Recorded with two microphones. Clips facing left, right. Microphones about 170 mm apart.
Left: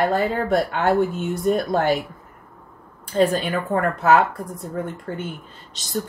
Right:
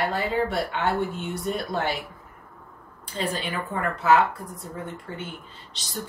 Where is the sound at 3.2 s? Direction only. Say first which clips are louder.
Left 10 dB; 50° left (ahead or behind).